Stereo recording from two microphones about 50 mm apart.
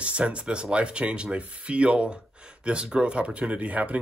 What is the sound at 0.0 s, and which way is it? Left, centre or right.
Speech, right.